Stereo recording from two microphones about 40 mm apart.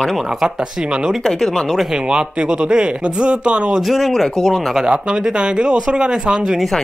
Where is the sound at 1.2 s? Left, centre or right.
Centre.